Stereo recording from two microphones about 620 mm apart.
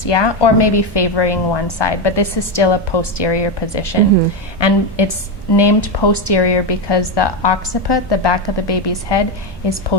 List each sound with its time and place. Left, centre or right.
0.0 s a woman's voice: left